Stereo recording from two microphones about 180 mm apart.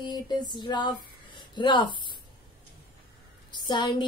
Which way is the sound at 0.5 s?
25° left (ahead or behind).